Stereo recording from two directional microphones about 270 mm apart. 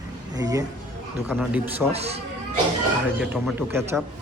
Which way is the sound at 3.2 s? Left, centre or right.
Centre.